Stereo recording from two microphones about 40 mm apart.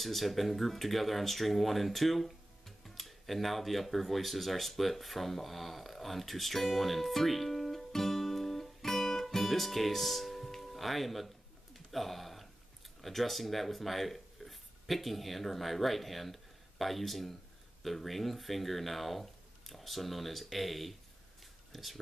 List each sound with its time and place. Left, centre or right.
0.0 s speech: centre
11.7 s a sound: centre
13.0 s speech: centre